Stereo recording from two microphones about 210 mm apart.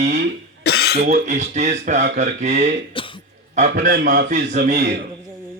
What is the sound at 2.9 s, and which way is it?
Throat clearing, 25° left (ahead or behind).